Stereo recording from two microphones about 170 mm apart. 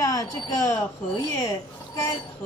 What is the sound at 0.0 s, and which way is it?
A woman's voice, 20° left (ahead or behind).